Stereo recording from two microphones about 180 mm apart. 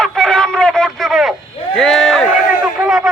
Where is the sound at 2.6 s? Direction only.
5° right (ahead or behind).